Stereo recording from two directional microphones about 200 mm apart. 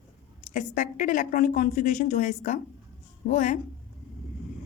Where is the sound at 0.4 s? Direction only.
40° left (ahead or behind).